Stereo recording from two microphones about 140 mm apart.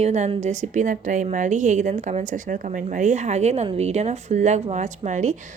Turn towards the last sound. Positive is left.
turn(degrees=-60)  # may be behind; listen again after turning